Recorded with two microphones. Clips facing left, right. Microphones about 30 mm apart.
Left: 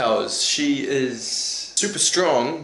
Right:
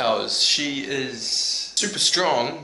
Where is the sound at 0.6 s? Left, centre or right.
Centre.